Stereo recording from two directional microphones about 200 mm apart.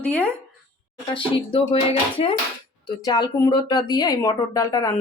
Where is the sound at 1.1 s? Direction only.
25° left (ahead or behind).